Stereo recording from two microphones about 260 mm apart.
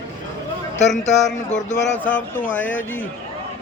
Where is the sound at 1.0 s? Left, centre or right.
Left.